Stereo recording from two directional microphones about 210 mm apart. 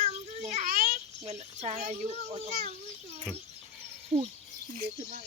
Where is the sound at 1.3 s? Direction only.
30° right (ahead or behind).